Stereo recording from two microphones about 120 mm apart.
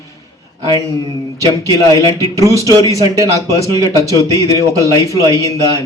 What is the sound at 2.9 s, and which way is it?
Speech, 30° right (ahead or behind).